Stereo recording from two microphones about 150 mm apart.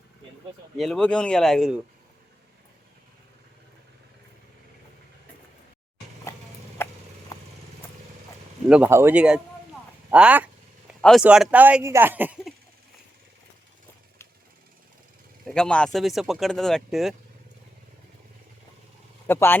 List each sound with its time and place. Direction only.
0.8 s speech: centre (ahead or behind)
6.3 s a sound: 20° left (ahead or behind)
7.3 s vehicle: 25° left (ahead or behind)
8.7 s speech: 15° right (ahead or behind)
15.4 s speech: 5° left (ahead or behind)
19.3 s speech: 15° left (ahead or behind)